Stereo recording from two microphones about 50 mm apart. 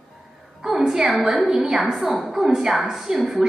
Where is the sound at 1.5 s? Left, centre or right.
Centre.